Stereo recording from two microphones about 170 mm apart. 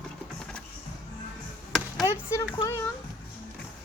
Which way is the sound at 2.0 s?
15° left (ahead or behind).